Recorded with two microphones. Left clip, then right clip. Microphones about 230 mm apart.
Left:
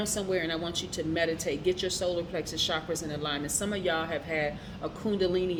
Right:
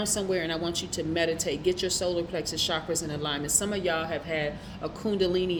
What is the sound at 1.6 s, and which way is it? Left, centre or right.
Speech, right.